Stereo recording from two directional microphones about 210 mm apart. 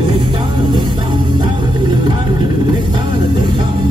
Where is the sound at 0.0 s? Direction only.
25° right (ahead or behind).